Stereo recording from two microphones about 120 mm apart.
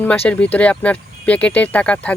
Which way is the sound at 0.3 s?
10° left (ahead or behind).